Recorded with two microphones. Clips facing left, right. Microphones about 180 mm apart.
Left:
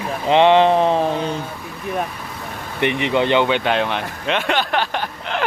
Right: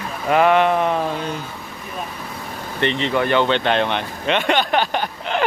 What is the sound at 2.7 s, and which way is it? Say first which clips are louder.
Speech: left 2 dB; 15° left (ahead or behind).